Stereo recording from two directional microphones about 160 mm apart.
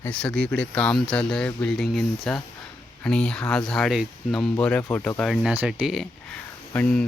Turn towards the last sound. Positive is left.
turn(degrees=5)  # may be behind; listen again after turning